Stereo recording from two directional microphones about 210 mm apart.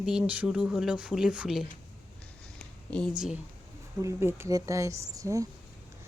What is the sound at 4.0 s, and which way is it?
Speech, 15° right (ahead or behind).